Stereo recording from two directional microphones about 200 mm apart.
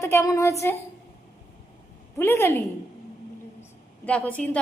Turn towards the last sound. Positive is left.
turn(degrees=5)  # may be behind; listen again after turning